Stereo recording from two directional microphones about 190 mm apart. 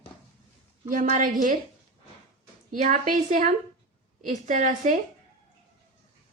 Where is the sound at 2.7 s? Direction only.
40° right (ahead or behind).